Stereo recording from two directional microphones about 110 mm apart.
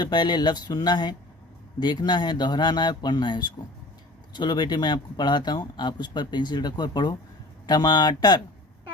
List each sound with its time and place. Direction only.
0.0 s speech: 40° left (ahead or behind)